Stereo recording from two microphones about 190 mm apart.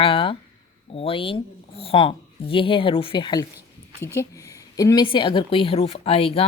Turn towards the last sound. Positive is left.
turn(degrees=30)  # may be behind; listen again after turning